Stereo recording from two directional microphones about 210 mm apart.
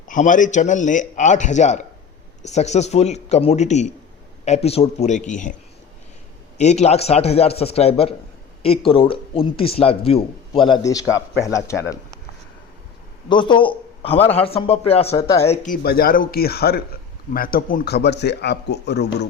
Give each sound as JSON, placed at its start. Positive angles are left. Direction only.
{"t": 0.1, "sound": "a man's voice", "side_deg": 40}
{"t": 6.6, "sound": "speech", "side_deg": 30}
{"t": 13.2, "sound": "a man's voice", "side_deg": 20}
{"t": 15.4, "sound": "a man's voice", "side_deg": 40}